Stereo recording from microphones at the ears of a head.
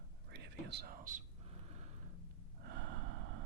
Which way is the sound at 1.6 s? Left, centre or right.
Right.